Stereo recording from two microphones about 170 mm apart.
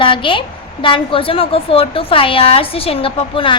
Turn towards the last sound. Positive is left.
turn(degrees=30)  # may be behind; listen again after turning